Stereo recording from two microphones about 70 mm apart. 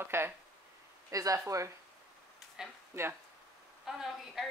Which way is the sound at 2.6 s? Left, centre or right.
Centre.